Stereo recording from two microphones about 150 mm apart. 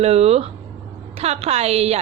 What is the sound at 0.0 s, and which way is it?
A woman's voice, 45° right (ahead or behind).